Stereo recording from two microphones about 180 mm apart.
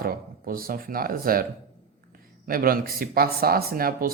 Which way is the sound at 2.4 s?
55° right (ahead or behind).